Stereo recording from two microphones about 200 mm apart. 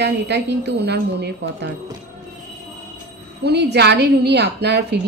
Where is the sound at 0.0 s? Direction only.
55° right (ahead or behind).